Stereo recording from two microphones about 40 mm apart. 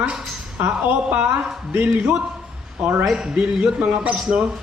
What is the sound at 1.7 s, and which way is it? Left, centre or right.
Speech, right.